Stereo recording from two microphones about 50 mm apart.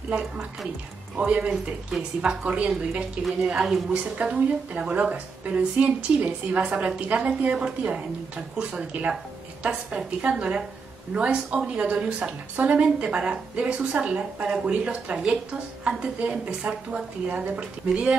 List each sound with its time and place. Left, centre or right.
1.1 s a woman's voice: right
1.9 s a woman's voice: centre
2.4 s a woman's voice: right
5.6 s a woman's voice: right